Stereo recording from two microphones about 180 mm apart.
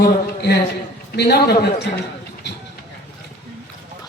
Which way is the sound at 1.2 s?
65° left (ahead or behind).